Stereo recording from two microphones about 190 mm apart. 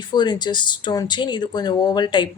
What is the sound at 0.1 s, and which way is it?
Speech, 20° left (ahead or behind).